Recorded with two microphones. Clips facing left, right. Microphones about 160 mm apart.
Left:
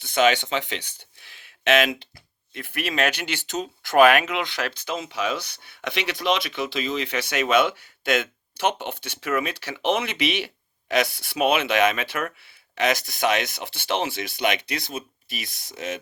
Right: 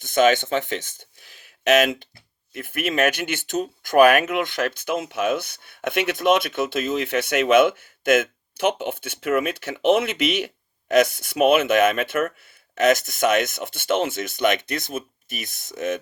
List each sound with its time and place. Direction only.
0.0 s speech: 45° right (ahead or behind)